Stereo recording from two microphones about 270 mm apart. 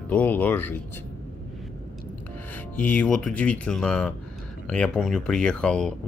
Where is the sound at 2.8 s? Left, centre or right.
Centre.